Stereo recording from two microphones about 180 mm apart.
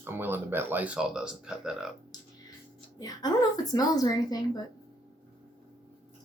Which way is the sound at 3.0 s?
20° left (ahead or behind).